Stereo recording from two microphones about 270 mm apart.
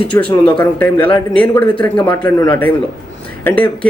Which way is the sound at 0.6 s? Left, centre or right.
Centre.